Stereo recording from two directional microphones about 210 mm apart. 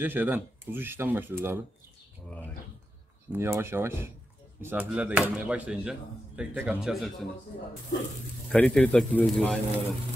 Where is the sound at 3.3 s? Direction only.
10° right (ahead or behind).